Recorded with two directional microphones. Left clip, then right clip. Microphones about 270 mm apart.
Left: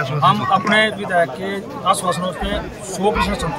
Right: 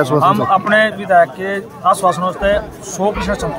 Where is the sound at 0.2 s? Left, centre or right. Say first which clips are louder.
Left 1 dB; centre.